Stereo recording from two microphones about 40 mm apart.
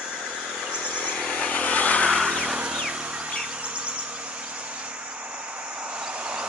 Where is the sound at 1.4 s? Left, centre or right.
Left.